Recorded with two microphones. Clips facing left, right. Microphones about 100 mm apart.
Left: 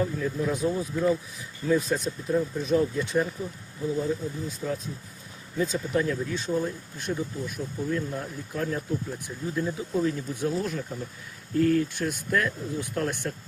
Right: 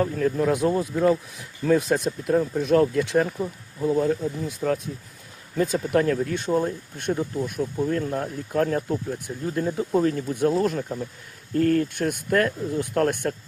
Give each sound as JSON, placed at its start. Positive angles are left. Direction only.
{"t": 0.0, "sound": "speech", "side_deg": -60}